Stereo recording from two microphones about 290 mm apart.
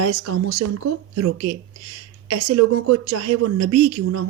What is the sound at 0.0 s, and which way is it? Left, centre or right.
Speech, right.